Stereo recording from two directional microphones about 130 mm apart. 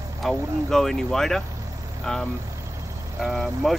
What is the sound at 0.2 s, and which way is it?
Speech, 5° left (ahead or behind).